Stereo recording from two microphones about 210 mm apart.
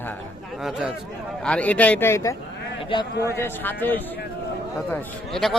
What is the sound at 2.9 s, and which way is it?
Speech, 25° left (ahead or behind).